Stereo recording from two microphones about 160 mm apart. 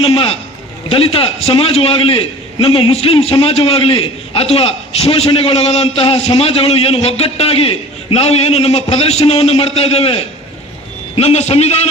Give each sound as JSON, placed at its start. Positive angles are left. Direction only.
{"t": 0.0, "sound": "a man's voice", "side_deg": 35}